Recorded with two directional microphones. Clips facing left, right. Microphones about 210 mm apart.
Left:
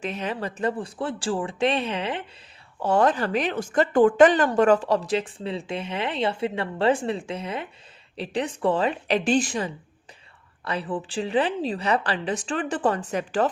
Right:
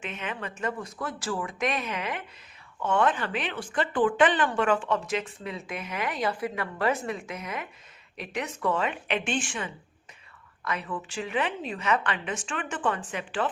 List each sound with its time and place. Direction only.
0.0 s speech: 35° left (ahead or behind)